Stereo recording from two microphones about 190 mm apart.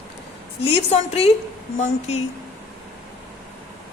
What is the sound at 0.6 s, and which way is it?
Speech, 30° left (ahead or behind).